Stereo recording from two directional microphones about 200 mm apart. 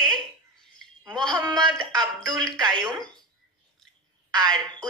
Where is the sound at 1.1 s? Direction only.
5° left (ahead or behind).